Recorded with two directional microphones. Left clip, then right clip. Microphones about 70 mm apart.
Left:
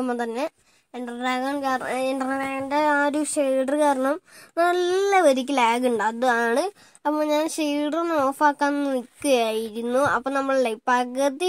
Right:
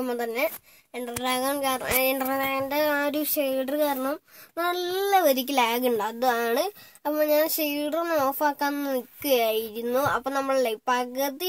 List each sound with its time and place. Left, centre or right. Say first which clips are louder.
0.0 s speech: left 1 dB; centre
0.9 s speech: left 1 dB; centre
3.4 s speech: left 4 dB; left
3.8 s speech: left 5 dB; left
5.2 s speech: left 3 dB; left
7.1 s speech: even; left
8.3 s speech: left 4 dB; left
9.2 s speech: left 2 dB; left